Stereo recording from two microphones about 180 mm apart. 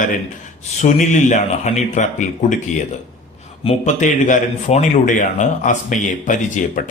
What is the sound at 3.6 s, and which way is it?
Speech, 45° left (ahead or behind).